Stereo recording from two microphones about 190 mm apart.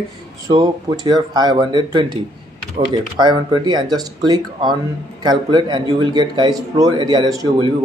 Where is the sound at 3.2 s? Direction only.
25° right (ahead or behind).